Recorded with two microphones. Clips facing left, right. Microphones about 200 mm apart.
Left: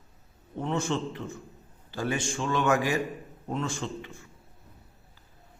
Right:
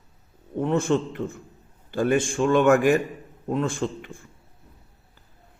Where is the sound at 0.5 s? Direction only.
55° right (ahead or behind).